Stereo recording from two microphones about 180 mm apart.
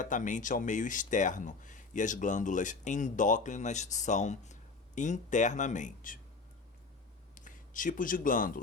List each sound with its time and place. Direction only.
0.0 s speech: 45° left (ahead or behind)
7.3 s speech: 45° left (ahead or behind)